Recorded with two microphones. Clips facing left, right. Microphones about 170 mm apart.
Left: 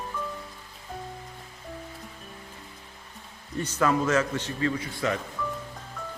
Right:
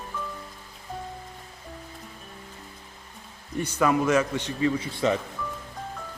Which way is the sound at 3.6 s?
10° right (ahead or behind).